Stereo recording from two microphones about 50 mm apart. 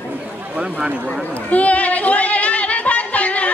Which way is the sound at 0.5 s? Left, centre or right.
Right.